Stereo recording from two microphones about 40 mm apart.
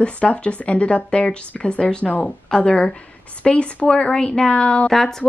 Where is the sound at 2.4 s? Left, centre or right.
Centre.